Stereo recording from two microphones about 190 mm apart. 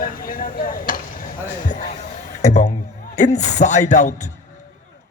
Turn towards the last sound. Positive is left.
turn(degrees=40)  # may be behind; listen again after turning